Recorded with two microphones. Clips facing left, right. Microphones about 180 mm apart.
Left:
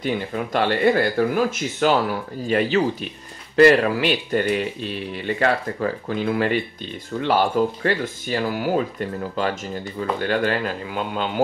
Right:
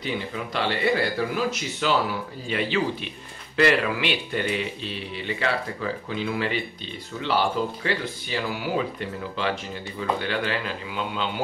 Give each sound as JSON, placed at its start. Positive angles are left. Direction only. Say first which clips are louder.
{"t": 0.0, "sound": "speech", "louder": "left 5 dB", "side_deg": 50}